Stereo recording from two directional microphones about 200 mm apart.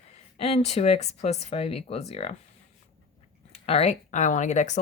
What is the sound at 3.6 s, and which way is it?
Speech, 30° left (ahead or behind).